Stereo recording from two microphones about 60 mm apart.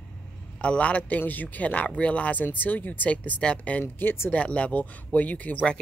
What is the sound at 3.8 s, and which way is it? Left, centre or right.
Speech, left.